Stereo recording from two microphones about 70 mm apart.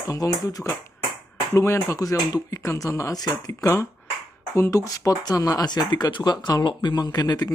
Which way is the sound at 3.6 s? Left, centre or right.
Left.